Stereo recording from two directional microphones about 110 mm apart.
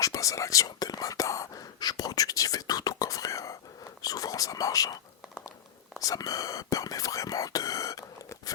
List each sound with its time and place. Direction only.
0.0 s speech: 30° left (ahead or behind)
4.0 s whispering: 35° left (ahead or behind)
6.0 s speech: 30° left (ahead or behind)